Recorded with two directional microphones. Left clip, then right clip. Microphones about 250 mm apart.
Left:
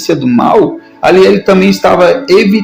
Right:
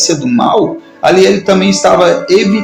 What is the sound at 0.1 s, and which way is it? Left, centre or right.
Speech, left.